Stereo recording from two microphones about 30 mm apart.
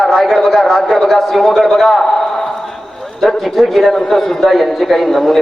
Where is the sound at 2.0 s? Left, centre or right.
Centre.